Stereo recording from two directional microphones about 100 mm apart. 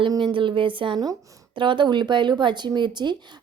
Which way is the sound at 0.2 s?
55° right (ahead or behind).